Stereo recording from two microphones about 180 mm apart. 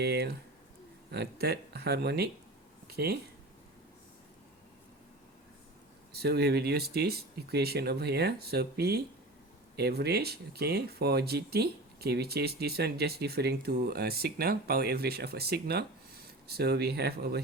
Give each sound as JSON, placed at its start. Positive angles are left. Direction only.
{"t": 0.0, "sound": "speech", "side_deg": -65}
{"t": 6.1, "sound": "speech", "side_deg": -60}